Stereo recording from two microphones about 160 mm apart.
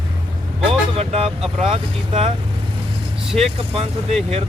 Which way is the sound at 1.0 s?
40° right (ahead or behind).